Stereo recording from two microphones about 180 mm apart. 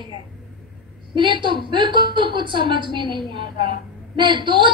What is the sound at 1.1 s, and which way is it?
A woman's voice, 25° right (ahead or behind).